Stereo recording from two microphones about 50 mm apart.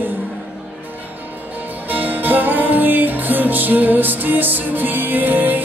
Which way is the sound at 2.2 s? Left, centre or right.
Right.